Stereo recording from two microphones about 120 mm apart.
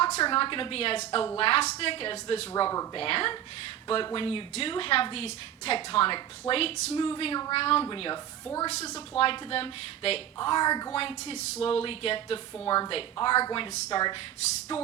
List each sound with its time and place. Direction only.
0.0 s a woman's voice: 45° left (ahead or behind)
2.6 s a woman's voice: 35° left (ahead or behind)
3.0 s a woman's voice: 50° left (ahead or behind)
8.6 s a woman's voice: 60° left (ahead or behind)
9.0 s a woman's voice: 45° left (ahead or behind)
10.3 s a woman's voice: 35° left (ahead or behind)
11.3 s a woman's voice: 60° left (ahead or behind)
12.6 s a woman's voice: 35° left (ahead or behind)
14.7 s a woman's voice: 50° left (ahead or behind)